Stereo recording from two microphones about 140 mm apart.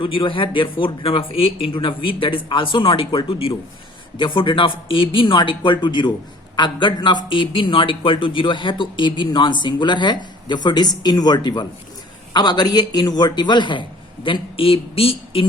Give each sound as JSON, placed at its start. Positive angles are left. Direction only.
{"t": 0.0, "sound": "a man's voice", "side_deg": 40}